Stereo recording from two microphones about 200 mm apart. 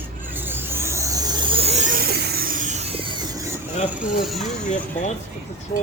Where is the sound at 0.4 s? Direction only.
10° right (ahead or behind); by 3.2 s 25° right (ahead or behind).